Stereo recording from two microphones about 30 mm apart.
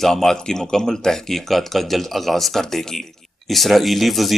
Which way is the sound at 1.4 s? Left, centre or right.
Centre.